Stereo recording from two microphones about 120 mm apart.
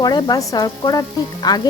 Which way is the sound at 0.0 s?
35° left (ahead or behind).